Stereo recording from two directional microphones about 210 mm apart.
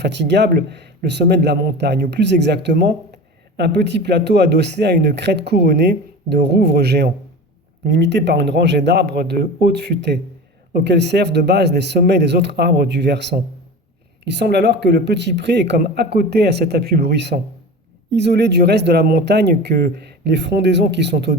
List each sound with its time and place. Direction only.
0.0 s a man's voice: 55° right (ahead or behind)